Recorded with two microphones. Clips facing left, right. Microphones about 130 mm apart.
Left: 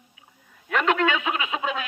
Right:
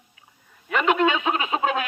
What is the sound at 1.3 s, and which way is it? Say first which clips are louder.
Speech: right 4 dB; 40° right (ahead or behind).